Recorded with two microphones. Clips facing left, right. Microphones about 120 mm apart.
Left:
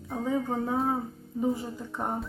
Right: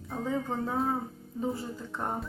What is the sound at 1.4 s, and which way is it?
Speech, 15° left (ahead or behind).